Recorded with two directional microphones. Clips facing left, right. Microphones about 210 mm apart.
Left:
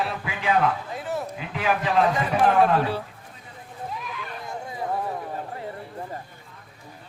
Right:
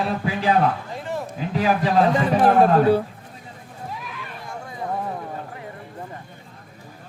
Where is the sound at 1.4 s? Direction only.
35° right (ahead or behind).